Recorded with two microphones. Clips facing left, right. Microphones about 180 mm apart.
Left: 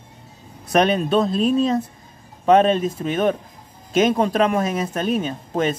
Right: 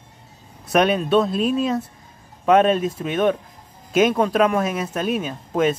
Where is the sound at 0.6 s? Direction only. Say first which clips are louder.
Even; 5° right (ahead or behind).